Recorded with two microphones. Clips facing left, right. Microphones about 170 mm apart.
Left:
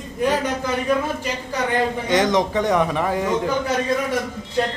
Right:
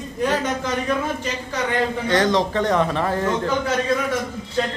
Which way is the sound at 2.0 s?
15° left (ahead or behind).